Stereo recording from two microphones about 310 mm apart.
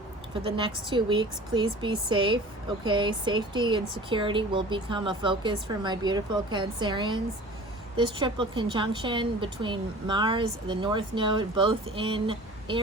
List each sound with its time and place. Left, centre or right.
0.4 s a woman's voice: centre